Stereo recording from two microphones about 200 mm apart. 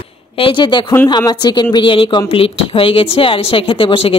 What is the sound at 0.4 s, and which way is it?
Speech, 25° left (ahead or behind).